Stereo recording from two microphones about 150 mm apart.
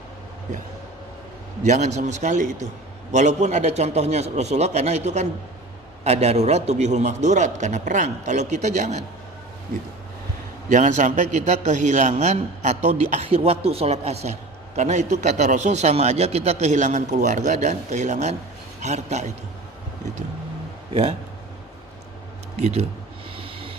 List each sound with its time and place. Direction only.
1.6 s a man's voice: 50° right (ahead or behind)
10.7 s a man's voice: 55° right (ahead or behind)
20.9 s a man's voice: 40° right (ahead or behind)
22.5 s a man's voice: 45° right (ahead or behind)
23.4 s vehicle: 35° right (ahead or behind)